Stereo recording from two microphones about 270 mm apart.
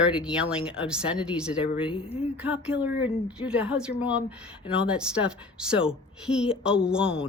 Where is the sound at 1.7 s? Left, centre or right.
Centre.